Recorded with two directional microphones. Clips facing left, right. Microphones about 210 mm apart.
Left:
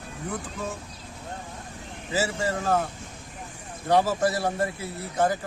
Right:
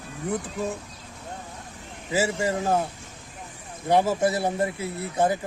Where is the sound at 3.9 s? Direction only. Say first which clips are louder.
Right 1 dB; 20° right (ahead or behind).